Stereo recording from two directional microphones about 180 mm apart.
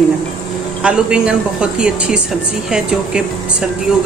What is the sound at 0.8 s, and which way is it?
A woman's voice, 5° right (ahead or behind).